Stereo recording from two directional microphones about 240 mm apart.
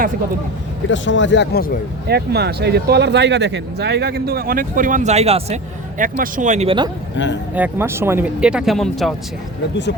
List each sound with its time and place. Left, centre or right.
0.9 s speech: left
2.0 s speech: right
7.5 s speech: centre